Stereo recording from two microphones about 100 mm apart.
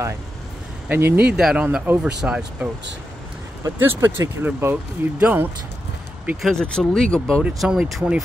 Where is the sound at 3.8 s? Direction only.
25° right (ahead or behind).